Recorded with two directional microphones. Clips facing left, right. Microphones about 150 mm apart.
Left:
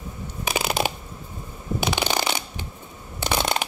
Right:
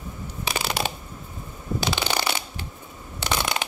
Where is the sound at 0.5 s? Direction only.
15° left (ahead or behind).